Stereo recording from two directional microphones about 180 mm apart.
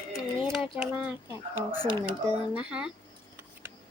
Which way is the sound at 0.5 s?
Centre (ahead or behind).